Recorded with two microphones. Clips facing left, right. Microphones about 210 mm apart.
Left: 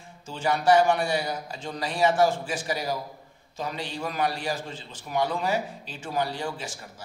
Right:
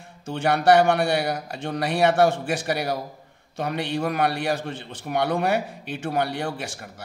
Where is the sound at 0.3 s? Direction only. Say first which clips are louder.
Right 3 dB; 65° right (ahead or behind).